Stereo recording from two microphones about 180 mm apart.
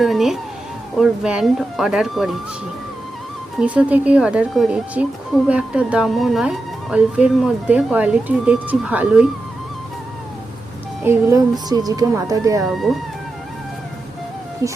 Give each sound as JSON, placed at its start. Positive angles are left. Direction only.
{"t": 0.0, "sound": "a sound", "side_deg": 0}
{"t": 0.9, "sound": "speech", "side_deg": -5}
{"t": 3.6, "sound": "speech", "side_deg": -5}
{"t": 11.0, "sound": "speech", "side_deg": -15}
{"t": 12.6, "sound": "speech", "side_deg": 0}
{"t": 14.6, "sound": "speech", "side_deg": -15}